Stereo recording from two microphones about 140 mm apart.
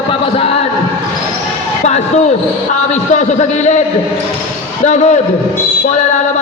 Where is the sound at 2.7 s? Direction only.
55° left (ahead or behind).